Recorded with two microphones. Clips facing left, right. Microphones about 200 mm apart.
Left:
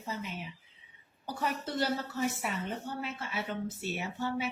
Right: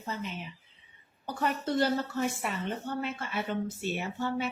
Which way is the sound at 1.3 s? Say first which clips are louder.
Right 4 dB; 5° left (ahead or behind).